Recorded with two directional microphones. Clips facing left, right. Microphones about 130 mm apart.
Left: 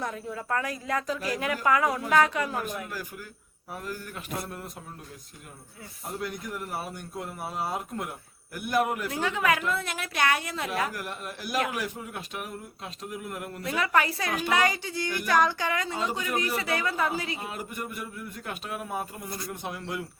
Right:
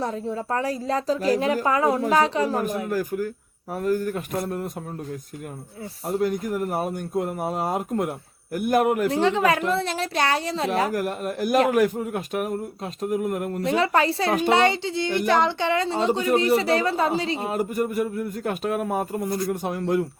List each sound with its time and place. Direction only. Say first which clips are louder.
0.0 s a woman's voice: right 7 dB; 30° right (ahead or behind)
6.1 s speech: right 11 dB; 45° right (ahead or behind)
9.0 s a woman's voice: right 7 dB; 30° right (ahead or behind)
13.6 s a woman's voice: right 4 dB; 30° right (ahead or behind)